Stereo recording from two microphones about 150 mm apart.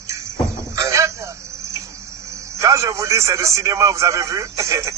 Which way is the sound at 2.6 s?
20° right (ahead or behind).